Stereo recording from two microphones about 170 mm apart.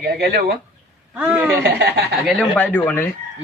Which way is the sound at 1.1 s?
10° right (ahead or behind).